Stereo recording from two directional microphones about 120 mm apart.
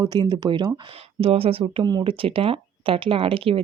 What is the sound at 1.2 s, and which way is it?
Speech, 55° right (ahead or behind).